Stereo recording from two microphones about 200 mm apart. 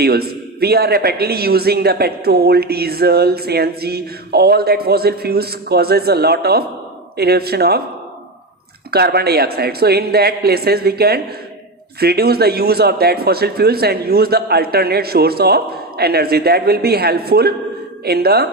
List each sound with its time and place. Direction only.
0.0 s a man's voice: 50° right (ahead or behind)
8.9 s a man's voice: 50° right (ahead or behind)